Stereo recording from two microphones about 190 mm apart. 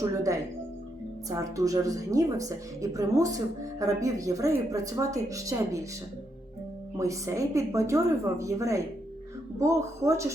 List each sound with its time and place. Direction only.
0.0 s a woman's voice: 15° right (ahead or behind)
6.9 s a woman's voice: 15° right (ahead or behind)